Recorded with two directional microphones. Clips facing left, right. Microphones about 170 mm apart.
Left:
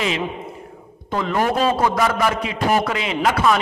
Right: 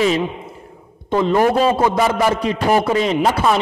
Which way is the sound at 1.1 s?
25° right (ahead or behind).